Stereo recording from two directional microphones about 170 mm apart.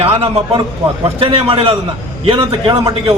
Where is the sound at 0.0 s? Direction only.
35° right (ahead or behind).